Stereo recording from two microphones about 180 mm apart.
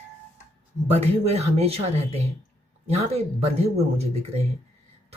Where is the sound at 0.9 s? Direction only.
35° right (ahead or behind).